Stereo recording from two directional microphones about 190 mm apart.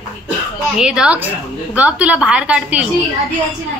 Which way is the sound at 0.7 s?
5° right (ahead or behind).